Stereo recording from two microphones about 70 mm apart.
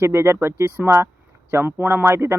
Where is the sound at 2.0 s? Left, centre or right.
Right.